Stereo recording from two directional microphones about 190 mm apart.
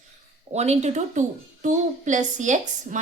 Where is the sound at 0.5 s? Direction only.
35° right (ahead or behind).